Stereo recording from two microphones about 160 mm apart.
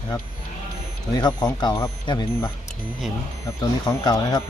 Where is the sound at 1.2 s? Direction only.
25° left (ahead or behind).